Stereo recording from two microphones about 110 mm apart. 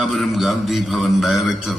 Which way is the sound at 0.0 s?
Centre (ahead or behind).